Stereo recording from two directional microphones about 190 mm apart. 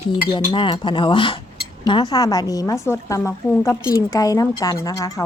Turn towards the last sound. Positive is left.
turn(degrees=20)  # may be behind; listen again after turning